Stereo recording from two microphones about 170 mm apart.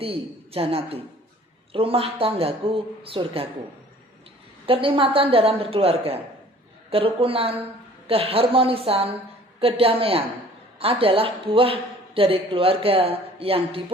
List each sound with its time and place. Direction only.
0.0 s a woman's voice: 35° right (ahead or behind)
4.6 s a woman's voice: 30° right (ahead or behind)